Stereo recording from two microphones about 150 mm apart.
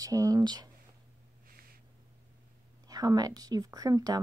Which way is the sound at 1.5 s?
75° right (ahead or behind).